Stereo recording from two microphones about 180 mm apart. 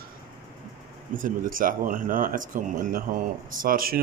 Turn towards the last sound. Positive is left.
turn(degrees=-55)  # may be behind; listen again after turning